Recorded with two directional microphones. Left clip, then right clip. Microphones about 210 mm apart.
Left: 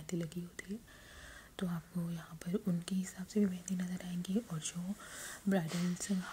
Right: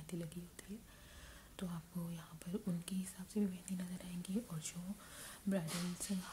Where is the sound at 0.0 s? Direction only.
15° left (ahead or behind).